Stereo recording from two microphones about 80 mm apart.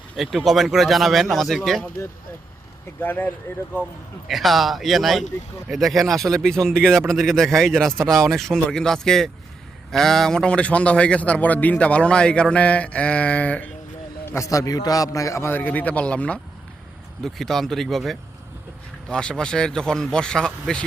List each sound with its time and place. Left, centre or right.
0.2 s a man's voice: centre
3.0 s speech: left
4.3 s a man's voice: centre
14.3 s a man's voice: left
15.5 s a man's voice: left
17.2 s a man's voice: centre